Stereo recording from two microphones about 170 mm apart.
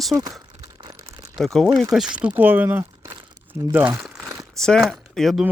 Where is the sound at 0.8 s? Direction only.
15° right (ahead or behind).